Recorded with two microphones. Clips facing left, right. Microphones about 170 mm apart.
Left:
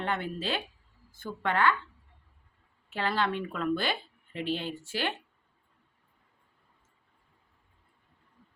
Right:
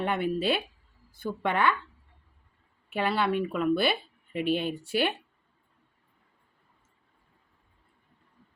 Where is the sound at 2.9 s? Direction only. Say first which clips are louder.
Right 3 dB; 15° right (ahead or behind).